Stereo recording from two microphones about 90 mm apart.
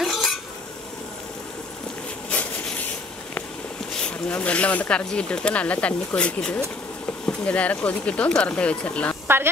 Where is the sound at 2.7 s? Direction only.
15° left (ahead or behind).